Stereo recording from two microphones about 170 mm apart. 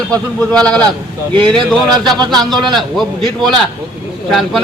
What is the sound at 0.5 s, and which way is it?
Speech, 5° left (ahead or behind).